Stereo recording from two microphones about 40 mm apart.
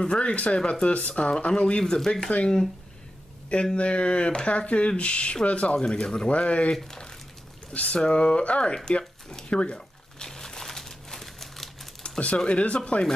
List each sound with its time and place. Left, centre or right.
0.0 s speech: left
3.7 s speech: left
5.8 s speech: centre
6.7 s speech: centre
7.7 s speech: left
9.5 s crumpling: left; by 11.9 s centre
12.0 s a sound: left
12.4 s speech: left